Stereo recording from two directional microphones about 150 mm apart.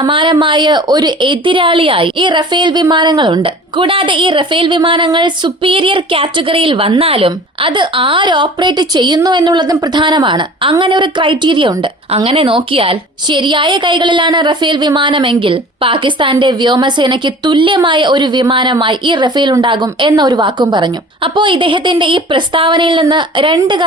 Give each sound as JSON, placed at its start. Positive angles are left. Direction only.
{"t": 0.0, "sound": "a woman's voice", "side_deg": -35}